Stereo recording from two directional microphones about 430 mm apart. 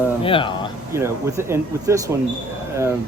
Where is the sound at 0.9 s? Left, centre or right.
Centre.